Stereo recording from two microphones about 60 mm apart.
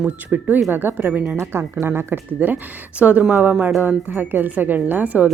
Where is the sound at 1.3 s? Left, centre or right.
Right.